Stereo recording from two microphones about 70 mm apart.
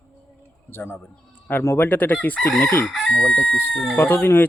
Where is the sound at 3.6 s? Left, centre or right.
Left.